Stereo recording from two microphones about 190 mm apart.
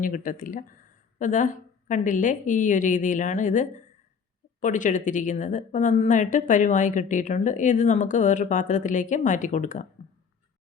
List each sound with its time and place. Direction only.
0.0 s a woman's voice: 45° left (ahead or behind)